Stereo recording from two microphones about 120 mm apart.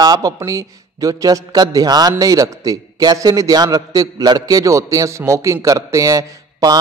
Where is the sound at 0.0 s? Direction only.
35° right (ahead or behind).